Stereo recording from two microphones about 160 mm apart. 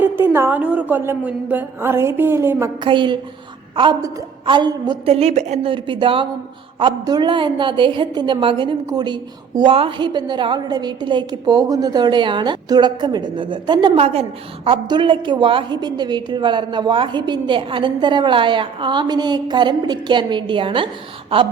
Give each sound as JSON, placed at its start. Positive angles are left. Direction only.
{"t": 0.0, "sound": "a woman's voice", "side_deg": -15}
{"t": 2.8, "sound": "a woman's voice", "side_deg": -30}
{"t": 5.7, "sound": "a woman's voice", "side_deg": -30}